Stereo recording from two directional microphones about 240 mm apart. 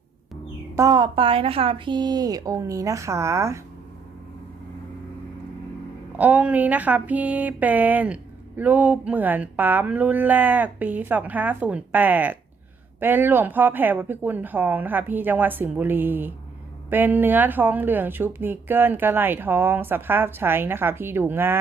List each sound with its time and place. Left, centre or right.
0.8 s speech: centre
6.1 s speech: centre